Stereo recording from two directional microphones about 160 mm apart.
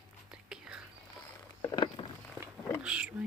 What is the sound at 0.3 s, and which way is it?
Whispering, 5° right (ahead or behind).